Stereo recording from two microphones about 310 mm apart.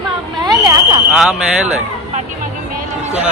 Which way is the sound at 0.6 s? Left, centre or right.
Centre.